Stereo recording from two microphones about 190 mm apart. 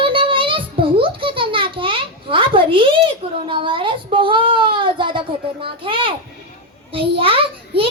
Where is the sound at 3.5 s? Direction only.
25° right (ahead or behind).